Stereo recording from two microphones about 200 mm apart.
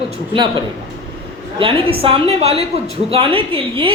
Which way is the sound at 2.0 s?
30° right (ahead or behind).